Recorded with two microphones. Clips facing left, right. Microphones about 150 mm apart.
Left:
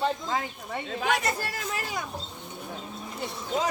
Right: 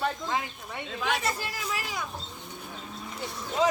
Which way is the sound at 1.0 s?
50° left (ahead or behind).